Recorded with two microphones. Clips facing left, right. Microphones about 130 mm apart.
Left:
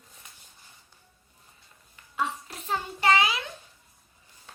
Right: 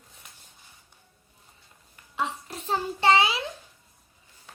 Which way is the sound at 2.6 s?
30° right (ahead or behind).